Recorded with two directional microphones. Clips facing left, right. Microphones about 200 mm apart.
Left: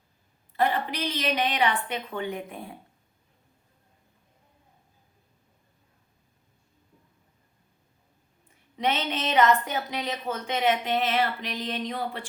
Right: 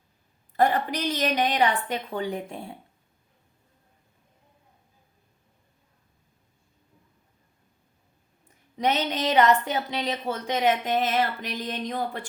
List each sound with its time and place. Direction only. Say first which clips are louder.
0.5 s speech: right 3 dB; 45° right (ahead or behind)
8.8 s speech: right 3 dB; 35° right (ahead or behind)